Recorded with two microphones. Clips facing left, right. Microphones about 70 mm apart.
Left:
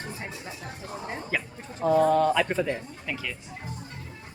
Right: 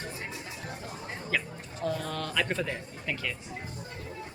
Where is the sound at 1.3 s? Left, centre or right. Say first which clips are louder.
Right 2 dB; centre.